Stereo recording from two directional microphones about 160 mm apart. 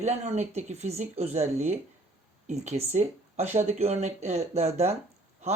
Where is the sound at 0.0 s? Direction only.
45° right (ahead or behind).